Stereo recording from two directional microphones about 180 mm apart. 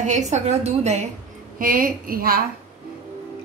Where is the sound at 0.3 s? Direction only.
35° right (ahead or behind).